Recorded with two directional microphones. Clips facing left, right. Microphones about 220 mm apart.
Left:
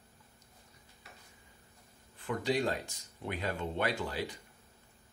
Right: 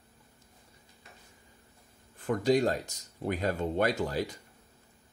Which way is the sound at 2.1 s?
45° right (ahead or behind).